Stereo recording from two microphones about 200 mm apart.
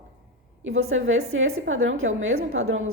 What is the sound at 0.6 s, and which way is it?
A woman's voice, 90° right.